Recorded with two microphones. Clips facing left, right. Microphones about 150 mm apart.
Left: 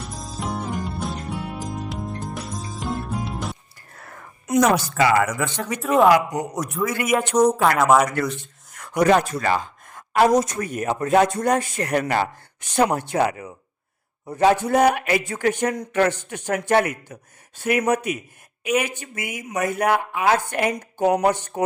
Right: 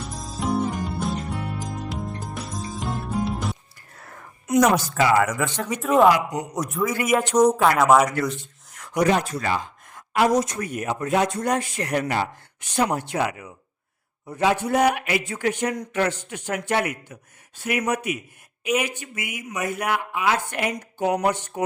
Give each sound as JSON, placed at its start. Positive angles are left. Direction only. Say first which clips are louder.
{"t": 0.0, "sound": "music", "louder": "right 2 dB", "side_deg": 0}
{"t": 4.5, "sound": "speech", "louder": "even", "side_deg": 0}
{"t": 8.8, "sound": "speech", "louder": "left 3 dB", "side_deg": 55}